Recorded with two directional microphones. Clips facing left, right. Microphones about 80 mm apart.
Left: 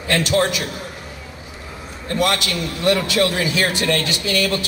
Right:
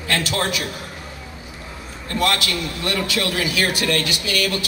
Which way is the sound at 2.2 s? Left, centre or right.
Left.